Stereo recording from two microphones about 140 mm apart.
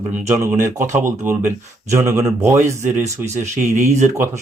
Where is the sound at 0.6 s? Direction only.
65° right (ahead or behind).